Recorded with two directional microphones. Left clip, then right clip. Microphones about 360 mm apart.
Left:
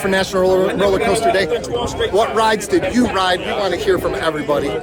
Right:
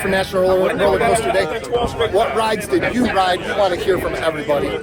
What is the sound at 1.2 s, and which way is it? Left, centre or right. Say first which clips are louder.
Speech: left 2 dB; centre.